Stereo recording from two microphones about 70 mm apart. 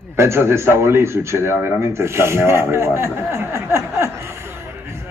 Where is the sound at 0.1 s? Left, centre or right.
Right.